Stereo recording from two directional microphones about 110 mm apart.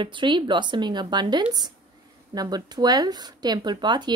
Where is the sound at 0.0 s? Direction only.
45° right (ahead or behind).